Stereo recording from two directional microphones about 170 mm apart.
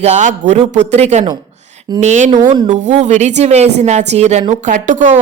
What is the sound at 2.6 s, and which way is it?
A woman's voice, 45° right (ahead or behind).